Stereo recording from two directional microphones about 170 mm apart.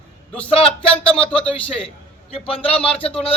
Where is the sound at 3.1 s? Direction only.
35° left (ahead or behind).